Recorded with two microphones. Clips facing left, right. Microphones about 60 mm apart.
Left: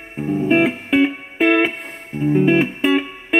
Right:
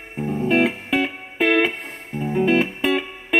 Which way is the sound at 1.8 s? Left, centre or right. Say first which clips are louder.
Left 6 dB; centre.